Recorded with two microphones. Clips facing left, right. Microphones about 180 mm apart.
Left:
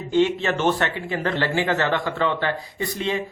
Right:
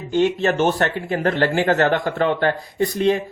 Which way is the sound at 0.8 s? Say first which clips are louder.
Right 4 dB; 45° right (ahead or behind).